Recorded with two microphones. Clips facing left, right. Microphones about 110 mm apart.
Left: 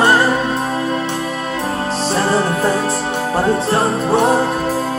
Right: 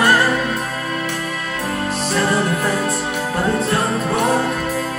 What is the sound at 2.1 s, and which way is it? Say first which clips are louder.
Music: left 2 dB; 30° left (ahead or behind).